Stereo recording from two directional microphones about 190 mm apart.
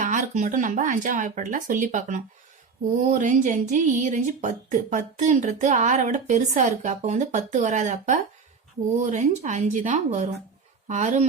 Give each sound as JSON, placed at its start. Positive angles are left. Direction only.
{"t": 0.0, "sound": "speech", "side_deg": -40}